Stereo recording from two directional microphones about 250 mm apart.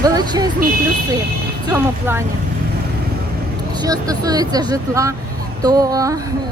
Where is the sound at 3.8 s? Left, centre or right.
Centre.